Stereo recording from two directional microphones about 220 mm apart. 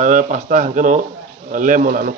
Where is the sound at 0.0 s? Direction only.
35° right (ahead or behind).